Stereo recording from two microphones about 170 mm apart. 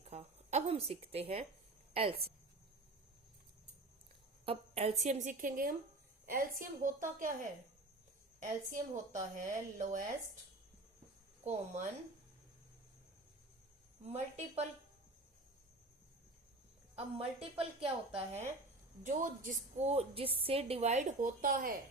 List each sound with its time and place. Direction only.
0.0 s a sound: 40° right (ahead or behind)
1.9 s speech: 35° right (ahead or behind)
4.4 s a woman's voice: 35° right (ahead or behind)
8.4 s a woman's voice: 50° right (ahead or behind)
11.4 s a woman's voice: 40° right (ahead or behind)
14.1 s a woman's voice: 40° right (ahead or behind)
17.7 s a woman's voice: 35° right (ahead or behind)
19.0 s a woman's voice: 50° right (ahead or behind)